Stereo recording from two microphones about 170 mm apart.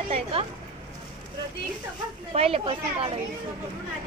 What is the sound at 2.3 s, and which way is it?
Speech, 35° right (ahead or behind).